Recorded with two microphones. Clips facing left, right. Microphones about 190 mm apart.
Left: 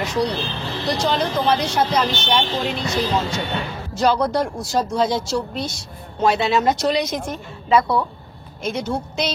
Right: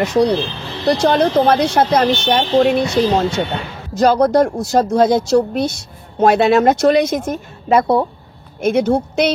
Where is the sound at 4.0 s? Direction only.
45° right (ahead or behind).